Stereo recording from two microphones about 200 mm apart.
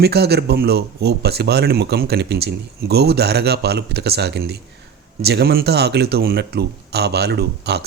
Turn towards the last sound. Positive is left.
turn(degrees=-55)  # may be behind; listen again after turning